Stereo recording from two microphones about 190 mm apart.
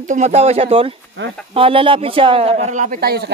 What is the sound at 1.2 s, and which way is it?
Speech, 75° right (ahead or behind).